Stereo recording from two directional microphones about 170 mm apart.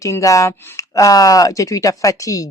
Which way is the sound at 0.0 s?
20° left (ahead or behind).